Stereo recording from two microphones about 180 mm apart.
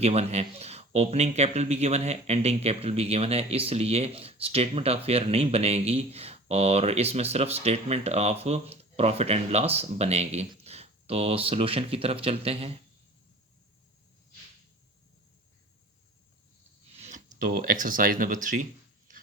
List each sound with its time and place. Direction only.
0.0 s speech: 35° right (ahead or behind)
17.0 s speech: 45° right (ahead or behind)